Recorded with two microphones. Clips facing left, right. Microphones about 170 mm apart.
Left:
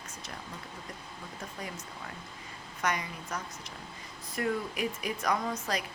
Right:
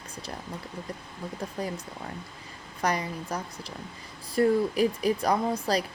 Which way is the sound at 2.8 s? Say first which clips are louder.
Right 5 dB; 35° right (ahead or behind).